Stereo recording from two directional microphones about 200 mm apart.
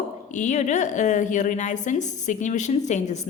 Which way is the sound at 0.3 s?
35° left (ahead or behind).